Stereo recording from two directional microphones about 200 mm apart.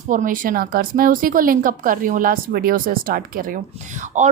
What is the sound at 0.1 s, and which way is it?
A woman's voice, 40° right (ahead or behind).